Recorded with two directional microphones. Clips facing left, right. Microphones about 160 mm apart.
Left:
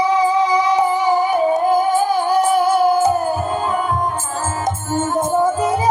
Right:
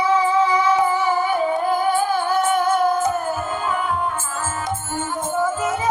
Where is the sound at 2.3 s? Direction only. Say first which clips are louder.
Left 4 dB; 35° left (ahead or behind).